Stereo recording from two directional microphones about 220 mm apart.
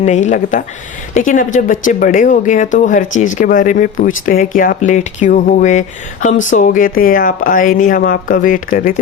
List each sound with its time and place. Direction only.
0.0 s speech: 30° left (ahead or behind)